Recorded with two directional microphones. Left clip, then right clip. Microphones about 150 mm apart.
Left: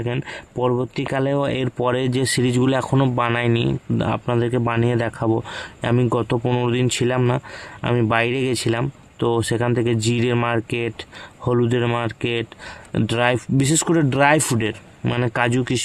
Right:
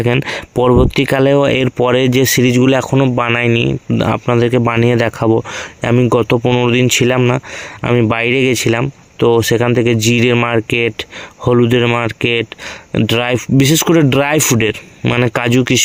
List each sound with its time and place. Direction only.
0.0 s speech: 40° right (ahead or behind); by 4.0 s 15° right (ahead or behind)
4.0 s speech: 25° right (ahead or behind)